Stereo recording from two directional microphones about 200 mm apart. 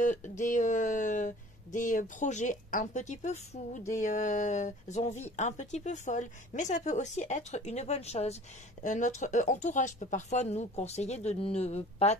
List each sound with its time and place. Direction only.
0.0 s speech: 40° left (ahead or behind)